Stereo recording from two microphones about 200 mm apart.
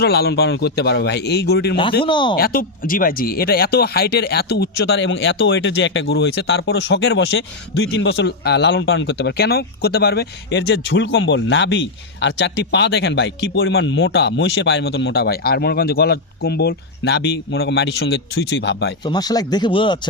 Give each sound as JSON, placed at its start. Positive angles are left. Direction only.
{"t": 0.0, "sound": "speech", "side_deg": 55}
{"t": 2.0, "sound": "speech", "side_deg": 25}
{"t": 2.3, "sound": "speech", "side_deg": 50}
{"t": 19.0, "sound": "speech", "side_deg": 20}